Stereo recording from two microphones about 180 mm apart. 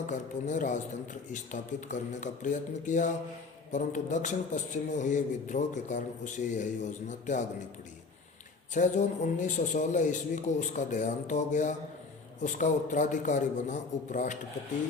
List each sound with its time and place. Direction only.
0.1 s a man's voice: 45° left (ahead or behind)
8.7 s a man's voice: 40° left (ahead or behind)